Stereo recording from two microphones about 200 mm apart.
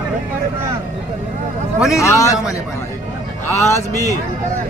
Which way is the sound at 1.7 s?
Centre (ahead or behind).